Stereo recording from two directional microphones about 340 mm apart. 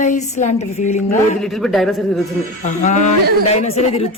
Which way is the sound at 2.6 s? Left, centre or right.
Left.